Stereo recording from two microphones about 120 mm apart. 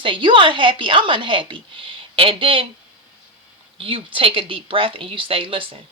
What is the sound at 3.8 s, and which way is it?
Speech, 45° right (ahead or behind).